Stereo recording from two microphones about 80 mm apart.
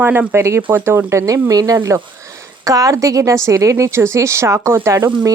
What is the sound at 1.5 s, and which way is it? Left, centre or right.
Speech, right.